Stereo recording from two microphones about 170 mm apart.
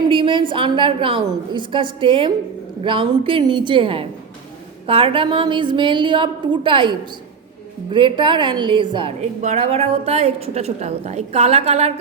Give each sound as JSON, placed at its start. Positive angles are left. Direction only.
{"t": 0.1, "sound": "a woman's voice", "side_deg": -30}
{"t": 9.4, "sound": "a woman's voice", "side_deg": -40}